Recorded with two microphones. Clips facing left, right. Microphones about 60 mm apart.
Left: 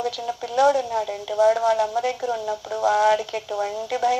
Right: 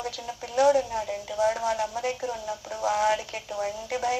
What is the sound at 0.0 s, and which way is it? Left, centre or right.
Speech, left.